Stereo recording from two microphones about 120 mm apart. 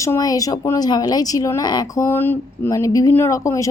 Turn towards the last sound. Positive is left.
turn(degrees=25)  # may be behind; listen again after turning